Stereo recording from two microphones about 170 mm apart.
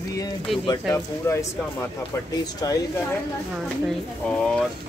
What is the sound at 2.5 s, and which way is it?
Speech, 20° left (ahead or behind).